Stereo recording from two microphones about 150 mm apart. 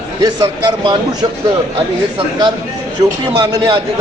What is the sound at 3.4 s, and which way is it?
Speech, 25° right (ahead or behind).